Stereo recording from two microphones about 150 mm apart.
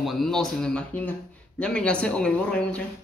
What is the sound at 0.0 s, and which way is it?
Speech, centre (ahead or behind).